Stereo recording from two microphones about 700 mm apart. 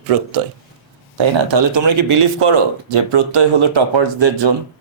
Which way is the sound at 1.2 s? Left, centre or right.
Right.